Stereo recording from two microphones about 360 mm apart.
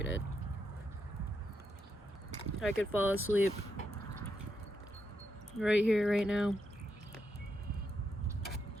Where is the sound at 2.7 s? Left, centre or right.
Left.